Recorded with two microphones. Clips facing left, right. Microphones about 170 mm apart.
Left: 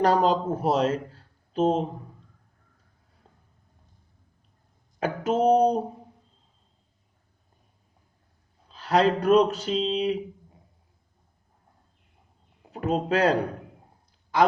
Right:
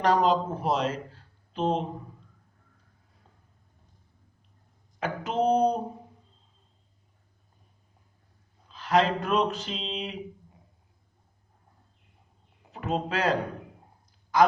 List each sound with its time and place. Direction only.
0.0 s a man's voice: 40° left (ahead or behind)
4.9 s speech: 40° left (ahead or behind)
8.7 s speech: 35° left (ahead or behind)
12.7 s speech: 40° left (ahead or behind)